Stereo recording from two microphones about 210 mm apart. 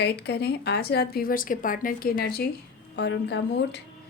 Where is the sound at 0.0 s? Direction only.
50° left (ahead or behind).